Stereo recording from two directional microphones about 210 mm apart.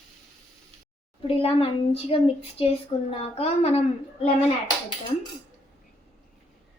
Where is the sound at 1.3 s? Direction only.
25° left (ahead or behind).